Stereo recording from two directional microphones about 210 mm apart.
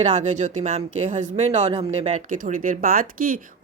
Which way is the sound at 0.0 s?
35° right (ahead or behind).